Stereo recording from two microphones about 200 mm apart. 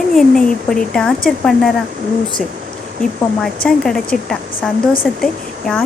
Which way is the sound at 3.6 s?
5° left (ahead or behind).